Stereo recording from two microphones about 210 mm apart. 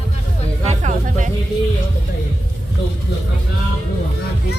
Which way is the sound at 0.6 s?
35° right (ahead or behind).